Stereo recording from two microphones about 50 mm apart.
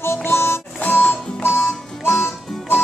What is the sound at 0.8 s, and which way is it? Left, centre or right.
Music, left.